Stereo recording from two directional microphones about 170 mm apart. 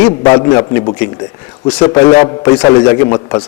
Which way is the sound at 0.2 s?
25° left (ahead or behind).